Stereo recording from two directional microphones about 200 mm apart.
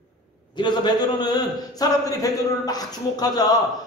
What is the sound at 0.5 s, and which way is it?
A man's voice, 20° left (ahead or behind).